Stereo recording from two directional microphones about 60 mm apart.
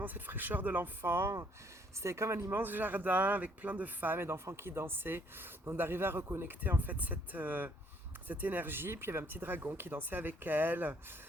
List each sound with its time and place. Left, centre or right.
0.0 s speech: right
2.6 s speech: right